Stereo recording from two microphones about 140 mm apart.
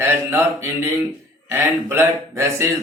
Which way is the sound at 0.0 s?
15° right (ahead or behind).